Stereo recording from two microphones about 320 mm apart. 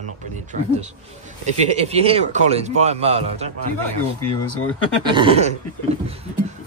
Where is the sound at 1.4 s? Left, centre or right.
Right.